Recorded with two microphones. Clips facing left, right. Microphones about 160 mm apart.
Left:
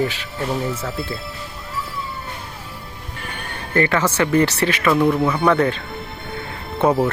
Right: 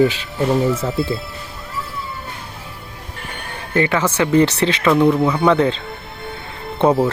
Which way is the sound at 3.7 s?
15° right (ahead or behind).